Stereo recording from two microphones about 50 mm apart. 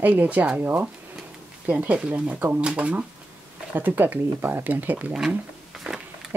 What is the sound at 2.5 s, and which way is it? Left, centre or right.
Speech, right.